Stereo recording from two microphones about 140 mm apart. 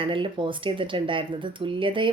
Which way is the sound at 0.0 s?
35° right (ahead or behind).